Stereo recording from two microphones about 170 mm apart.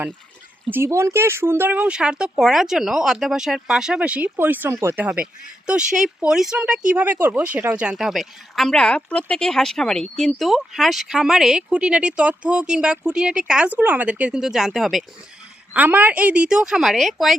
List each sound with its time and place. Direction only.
0.7 s speech: 15° right (ahead or behind)